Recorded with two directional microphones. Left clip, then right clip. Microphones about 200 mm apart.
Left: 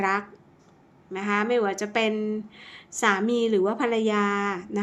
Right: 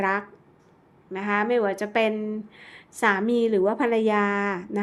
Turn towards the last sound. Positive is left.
turn(degrees=-20)  # may be behind; listen again after turning